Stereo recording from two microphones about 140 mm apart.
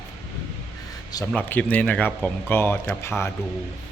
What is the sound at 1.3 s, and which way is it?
Speech, 10° left (ahead or behind).